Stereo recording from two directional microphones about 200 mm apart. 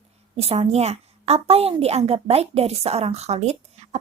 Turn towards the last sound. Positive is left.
turn(degrees=-30)  # may be behind; listen again after turning